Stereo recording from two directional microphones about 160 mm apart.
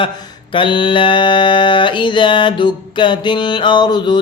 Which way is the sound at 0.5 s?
30° left (ahead or behind).